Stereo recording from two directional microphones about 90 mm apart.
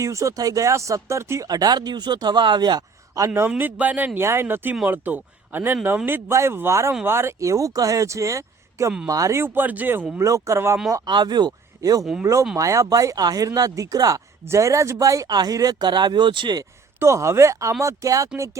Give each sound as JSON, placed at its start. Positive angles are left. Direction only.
{"t": 0.0, "sound": "speech", "side_deg": -35}
{"t": 1.5, "sound": "speech", "side_deg": -45}
{"t": 3.2, "sound": "speech", "side_deg": -30}
{"t": 10.2, "sound": "speech", "side_deg": -35}
{"t": 11.0, "sound": "speech", "side_deg": -55}
{"t": 11.8, "sound": "speech", "side_deg": -45}
{"t": 17.0, "sound": "speech", "side_deg": -35}